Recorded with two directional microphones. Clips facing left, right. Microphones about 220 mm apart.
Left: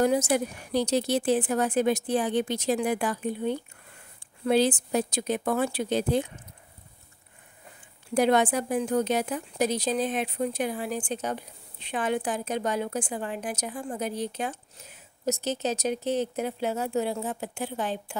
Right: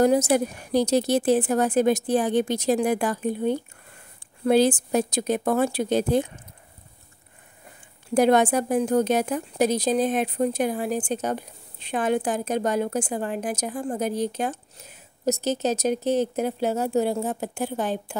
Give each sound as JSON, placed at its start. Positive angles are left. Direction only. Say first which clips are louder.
{"t": 0.0, "sound": "a woman's voice", "louder": "right 4 dB", "side_deg": -40}
{"t": 8.1, "sound": "a woman's voice", "louder": "right 4 dB", "side_deg": -45}